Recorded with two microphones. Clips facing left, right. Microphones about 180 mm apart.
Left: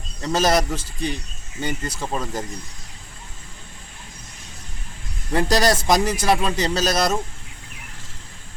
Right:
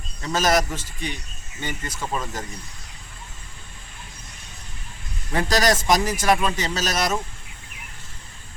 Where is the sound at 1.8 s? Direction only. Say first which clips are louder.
Left 2 dB; 35° left (ahead or behind).